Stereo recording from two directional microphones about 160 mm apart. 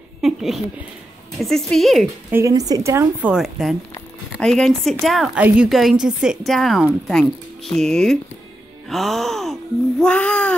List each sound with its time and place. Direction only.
0.2 s a sound: centre (ahead or behind)
1.4 s a woman's voice: centre (ahead or behind)
2.3 s a woman's voice: 20° right (ahead or behind); by 10.5 s 10° left (ahead or behind)